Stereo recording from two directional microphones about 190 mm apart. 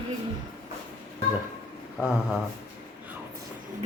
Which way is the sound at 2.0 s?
Centre (ahead or behind).